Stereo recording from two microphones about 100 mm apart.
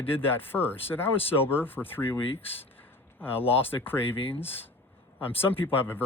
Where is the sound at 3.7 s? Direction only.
20° left (ahead or behind).